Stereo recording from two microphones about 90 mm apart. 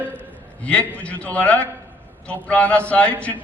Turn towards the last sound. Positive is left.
turn(degrees=15)  # may be behind; listen again after turning